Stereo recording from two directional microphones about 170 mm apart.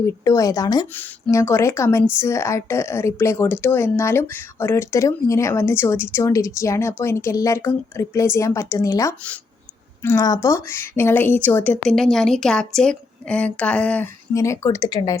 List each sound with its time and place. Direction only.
0.0 s a woman's voice: 20° left (ahead or behind)